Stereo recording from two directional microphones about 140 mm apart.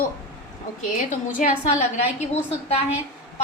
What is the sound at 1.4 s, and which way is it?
A woman's voice, 55° left (ahead or behind).